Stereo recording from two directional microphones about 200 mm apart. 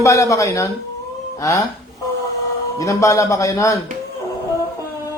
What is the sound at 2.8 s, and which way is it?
Speech, 15° left (ahead or behind).